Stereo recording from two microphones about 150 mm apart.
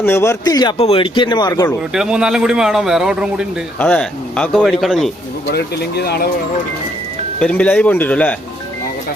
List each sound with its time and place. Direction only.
0.0 s a man's voice: 15° left (ahead or behind)
0.8 s speech: 40° left (ahead or behind)
1.9 s speech: 5° right (ahead or behind)
3.8 s speech: 5° left (ahead or behind)
5.5 s speech: 90° left
7.4 s speech: 10° left (ahead or behind)